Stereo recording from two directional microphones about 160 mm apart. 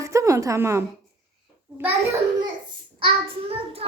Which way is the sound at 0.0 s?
20° right (ahead or behind).